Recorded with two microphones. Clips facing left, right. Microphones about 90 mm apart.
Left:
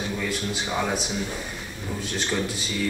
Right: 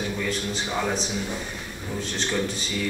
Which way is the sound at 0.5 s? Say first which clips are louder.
Even; 5° left (ahead or behind).